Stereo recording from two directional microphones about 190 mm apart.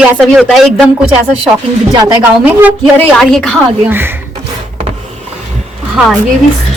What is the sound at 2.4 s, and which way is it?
Speech, 10° right (ahead or behind).